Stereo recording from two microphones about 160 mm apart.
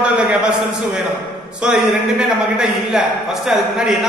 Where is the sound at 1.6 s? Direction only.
5° right (ahead or behind).